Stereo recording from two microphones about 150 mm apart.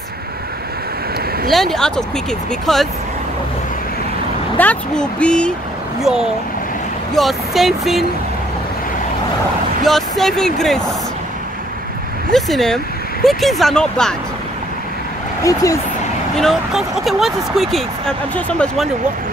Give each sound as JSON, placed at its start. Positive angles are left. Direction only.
{"t": 1.5, "sound": "speech", "side_deg": 0}
{"t": 4.6, "sound": "speech", "side_deg": 10}
{"t": 7.2, "sound": "speech", "side_deg": 0}
{"t": 9.8, "sound": "speech", "side_deg": 0}
{"t": 12.3, "sound": "speech", "side_deg": 0}
{"t": 15.4, "sound": "speech", "side_deg": 20}
{"t": 16.3, "sound": "speech", "side_deg": 0}